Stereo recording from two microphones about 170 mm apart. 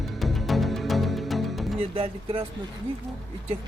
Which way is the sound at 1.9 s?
35° right (ahead or behind).